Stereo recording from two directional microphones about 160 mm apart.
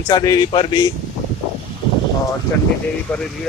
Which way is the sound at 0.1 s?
25° left (ahead or behind).